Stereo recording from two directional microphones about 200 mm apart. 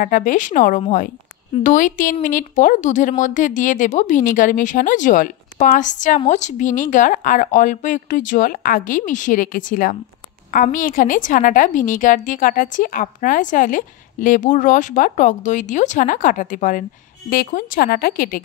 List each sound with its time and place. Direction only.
0.0 s speech: 40° left (ahead or behind)